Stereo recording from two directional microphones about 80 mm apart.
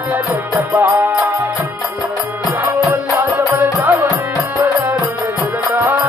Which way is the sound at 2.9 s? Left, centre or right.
Right.